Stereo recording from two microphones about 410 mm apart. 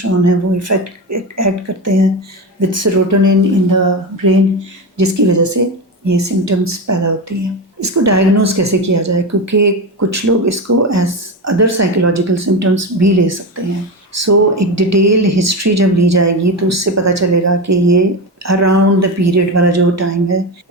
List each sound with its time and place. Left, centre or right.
0.3 s speech: right